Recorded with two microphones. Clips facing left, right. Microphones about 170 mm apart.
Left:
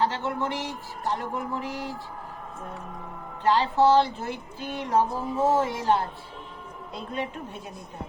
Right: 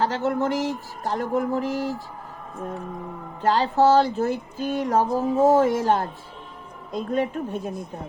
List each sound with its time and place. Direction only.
0.0 s speech: 45° right (ahead or behind)
3.4 s speech: 40° right (ahead or behind)